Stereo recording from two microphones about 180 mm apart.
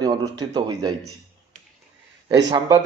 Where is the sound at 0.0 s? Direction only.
25° right (ahead or behind).